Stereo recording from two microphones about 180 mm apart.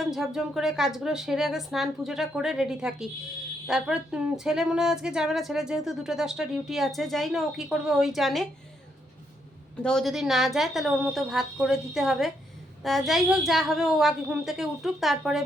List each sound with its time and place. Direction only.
0.1 s speech: centre (ahead or behind)
9.8 s speech: centre (ahead or behind)